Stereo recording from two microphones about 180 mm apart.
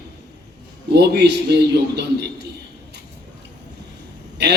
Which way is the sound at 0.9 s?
70° right (ahead or behind).